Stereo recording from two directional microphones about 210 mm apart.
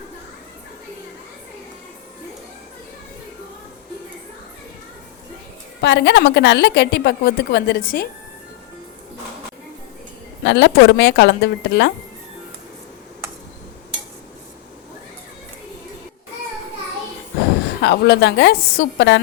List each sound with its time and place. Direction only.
5.8 s a woman's voice: 55° left (ahead or behind)
10.4 s a woman's voice: 55° left (ahead or behind)
17.7 s a woman's voice: 55° left (ahead or behind)